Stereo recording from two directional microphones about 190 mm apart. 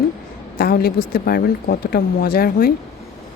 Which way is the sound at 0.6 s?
50° left (ahead or behind).